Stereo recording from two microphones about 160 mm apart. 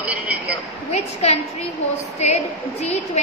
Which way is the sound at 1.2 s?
40° left (ahead or behind).